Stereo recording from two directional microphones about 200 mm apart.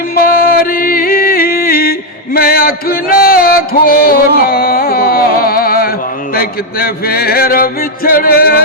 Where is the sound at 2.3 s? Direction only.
50° left (ahead or behind).